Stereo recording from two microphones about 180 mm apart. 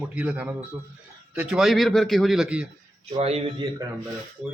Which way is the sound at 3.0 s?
35° right (ahead or behind).